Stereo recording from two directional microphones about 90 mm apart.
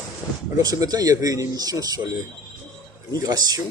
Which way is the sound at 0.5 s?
45° right (ahead or behind).